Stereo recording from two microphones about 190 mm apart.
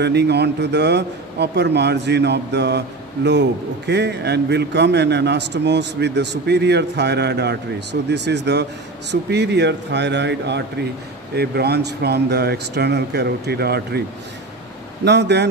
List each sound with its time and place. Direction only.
0.0 s a man's voice: 60° right (ahead or behind)
15.0 s a man's voice: 65° right (ahead or behind)